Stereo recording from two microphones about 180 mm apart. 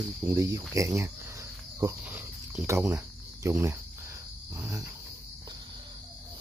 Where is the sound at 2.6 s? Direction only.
15° right (ahead or behind).